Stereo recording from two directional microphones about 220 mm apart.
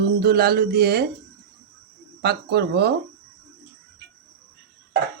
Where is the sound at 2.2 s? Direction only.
45° right (ahead or behind).